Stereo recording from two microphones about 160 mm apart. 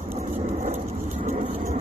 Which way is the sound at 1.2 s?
50° right (ahead or behind).